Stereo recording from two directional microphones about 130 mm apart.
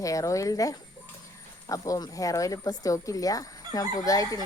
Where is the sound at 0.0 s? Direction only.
25° left (ahead or behind).